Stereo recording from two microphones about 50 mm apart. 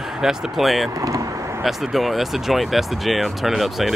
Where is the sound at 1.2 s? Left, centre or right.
Right.